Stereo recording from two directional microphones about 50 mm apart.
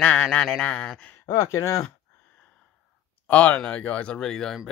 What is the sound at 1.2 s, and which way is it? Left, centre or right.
Speech, left.